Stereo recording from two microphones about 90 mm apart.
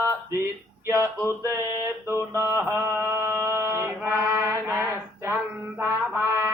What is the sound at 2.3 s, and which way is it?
Mantra, 30° right (ahead or behind).